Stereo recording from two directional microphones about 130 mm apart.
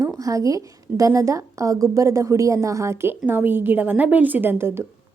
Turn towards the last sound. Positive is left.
turn(degrees=-20)  # may be behind; listen again after turning